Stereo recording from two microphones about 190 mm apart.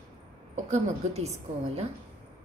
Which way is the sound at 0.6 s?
40° right (ahead or behind).